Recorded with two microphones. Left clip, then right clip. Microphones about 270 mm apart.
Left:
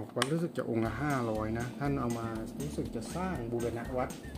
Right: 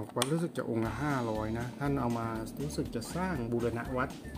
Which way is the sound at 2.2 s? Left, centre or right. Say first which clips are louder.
Right 2 dB; centre.